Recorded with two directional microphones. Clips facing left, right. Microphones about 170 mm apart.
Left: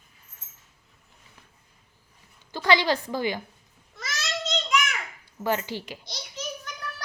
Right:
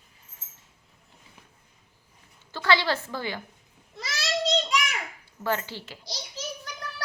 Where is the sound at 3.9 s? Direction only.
30° right (ahead or behind).